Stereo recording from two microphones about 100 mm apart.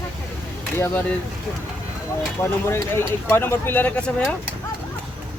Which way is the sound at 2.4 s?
25° left (ahead or behind).